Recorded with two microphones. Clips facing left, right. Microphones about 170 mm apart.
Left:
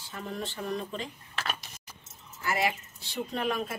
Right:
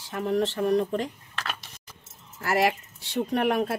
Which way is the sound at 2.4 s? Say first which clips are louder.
Right 6 dB; 70° right (ahead or behind).